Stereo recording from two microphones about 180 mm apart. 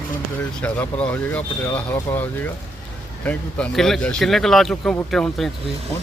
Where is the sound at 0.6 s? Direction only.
5° left (ahead or behind).